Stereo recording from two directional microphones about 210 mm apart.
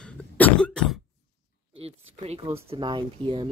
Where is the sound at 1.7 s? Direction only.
30° right (ahead or behind).